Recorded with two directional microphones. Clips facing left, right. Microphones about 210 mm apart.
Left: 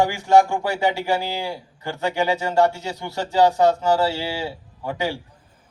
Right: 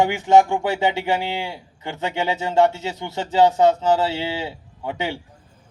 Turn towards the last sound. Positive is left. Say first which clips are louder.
# left 1 dB
turn(degrees=-20)  # may be behind; listen again after turning